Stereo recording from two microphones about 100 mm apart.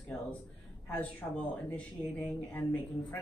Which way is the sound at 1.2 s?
25° left (ahead or behind).